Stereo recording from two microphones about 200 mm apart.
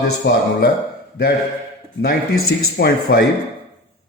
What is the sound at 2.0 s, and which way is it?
Speech, 50° left (ahead or behind).